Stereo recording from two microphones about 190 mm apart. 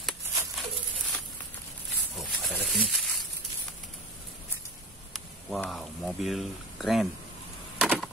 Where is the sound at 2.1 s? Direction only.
Centre (ahead or behind).